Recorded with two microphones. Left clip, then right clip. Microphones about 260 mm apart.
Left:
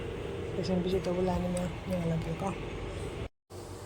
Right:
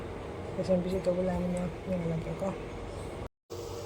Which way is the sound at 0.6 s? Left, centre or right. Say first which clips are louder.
Right 3 dB; centre.